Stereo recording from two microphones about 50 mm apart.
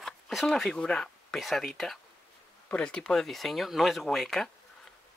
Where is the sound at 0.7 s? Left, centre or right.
Centre.